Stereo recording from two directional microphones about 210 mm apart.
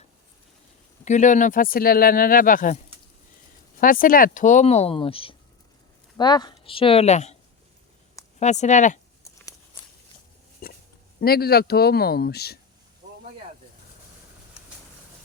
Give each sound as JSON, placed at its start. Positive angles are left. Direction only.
{"t": 1.0, "sound": "speech", "side_deg": 35}
{"t": 3.8, "sound": "speech", "side_deg": 40}
{"t": 8.4, "sound": "speech", "side_deg": 35}
{"t": 10.6, "sound": "oink", "side_deg": 40}
{"t": 11.2, "sound": "speech", "side_deg": 45}